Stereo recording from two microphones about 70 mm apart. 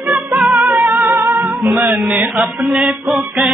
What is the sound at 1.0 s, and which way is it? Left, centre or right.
Music, right.